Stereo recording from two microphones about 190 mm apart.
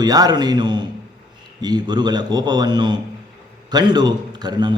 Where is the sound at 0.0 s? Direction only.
20° right (ahead or behind).